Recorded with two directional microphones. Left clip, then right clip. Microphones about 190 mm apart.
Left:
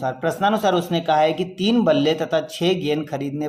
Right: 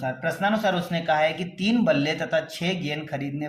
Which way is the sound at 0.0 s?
45° left (ahead or behind).